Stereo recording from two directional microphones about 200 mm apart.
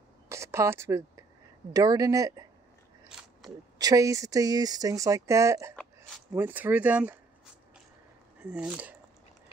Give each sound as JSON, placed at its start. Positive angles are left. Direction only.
{"t": 0.3, "sound": "a sound", "side_deg": -15}
{"t": 1.7, "sound": "speech", "side_deg": -20}
{"t": 3.1, "sound": "biting", "side_deg": -5}
{"t": 3.7, "sound": "speech", "side_deg": -15}
{"t": 8.4, "sound": "speech", "side_deg": -5}